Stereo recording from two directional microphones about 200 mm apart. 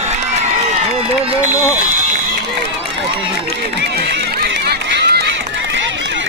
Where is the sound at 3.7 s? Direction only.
60° right (ahead or behind).